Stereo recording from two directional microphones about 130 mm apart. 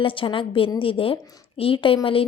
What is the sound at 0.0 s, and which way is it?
A woman's voice, 40° left (ahead or behind).